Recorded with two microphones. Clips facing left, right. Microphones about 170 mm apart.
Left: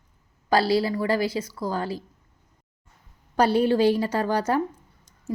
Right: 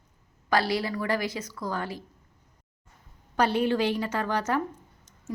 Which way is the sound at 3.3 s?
35° left (ahead or behind).